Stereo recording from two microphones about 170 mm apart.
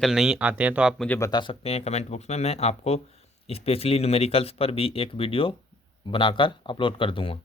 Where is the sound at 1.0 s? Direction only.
10° left (ahead or behind).